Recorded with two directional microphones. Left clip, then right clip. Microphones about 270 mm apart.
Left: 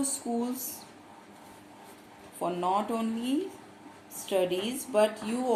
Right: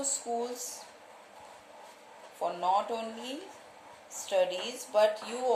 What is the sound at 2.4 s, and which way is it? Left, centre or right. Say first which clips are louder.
Speech: even; centre.